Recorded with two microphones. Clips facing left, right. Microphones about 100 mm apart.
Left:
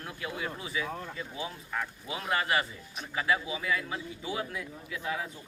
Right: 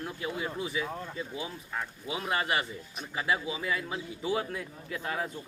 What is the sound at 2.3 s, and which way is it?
A man's voice, 25° right (ahead or behind).